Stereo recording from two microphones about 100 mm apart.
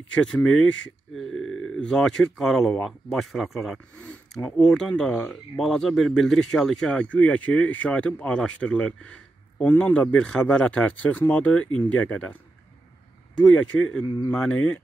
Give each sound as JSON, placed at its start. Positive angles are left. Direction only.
{"t": 0.1, "sound": "speech", "side_deg": 10}
{"t": 13.5, "sound": "speech", "side_deg": 10}
{"t": 14.0, "sound": "speech", "side_deg": 55}
{"t": 14.3, "sound": "speech", "side_deg": 10}